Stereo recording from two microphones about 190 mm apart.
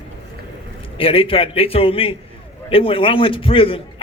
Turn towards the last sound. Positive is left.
turn(degrees=30)  # may be behind; listen again after turning